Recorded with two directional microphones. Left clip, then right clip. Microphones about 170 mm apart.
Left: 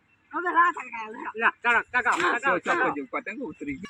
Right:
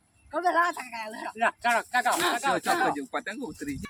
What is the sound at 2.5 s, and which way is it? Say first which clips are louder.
Speech: even; 20° right (ahead or behind).